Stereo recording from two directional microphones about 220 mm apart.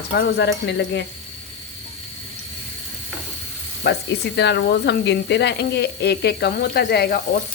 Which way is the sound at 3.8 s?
45° left (ahead or behind).